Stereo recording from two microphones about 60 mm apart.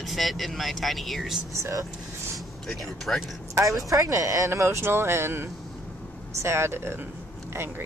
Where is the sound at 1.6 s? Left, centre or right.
Right.